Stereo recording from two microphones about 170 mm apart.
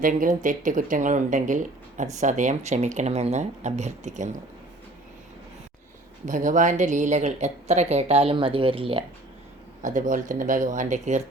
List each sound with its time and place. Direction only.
0.0 s speech: 50° right (ahead or behind)
6.2 s speech: 50° right (ahead or behind); by 9.0 s 30° right (ahead or behind)
9.8 s speech: 50° right (ahead or behind)